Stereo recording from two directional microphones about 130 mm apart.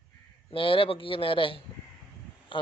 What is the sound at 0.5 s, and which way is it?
A man's voice, 45° left (ahead or behind).